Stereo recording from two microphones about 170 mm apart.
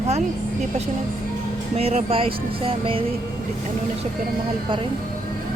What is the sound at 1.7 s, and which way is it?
Speech, 40° right (ahead or behind).